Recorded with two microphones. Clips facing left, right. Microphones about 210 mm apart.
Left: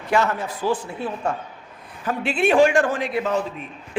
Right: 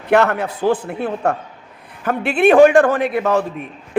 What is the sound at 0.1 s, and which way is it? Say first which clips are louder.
A man's voice: right 6 dB; 65° right (ahead or behind).